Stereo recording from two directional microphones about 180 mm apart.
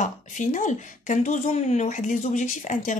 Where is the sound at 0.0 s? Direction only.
45° left (ahead or behind).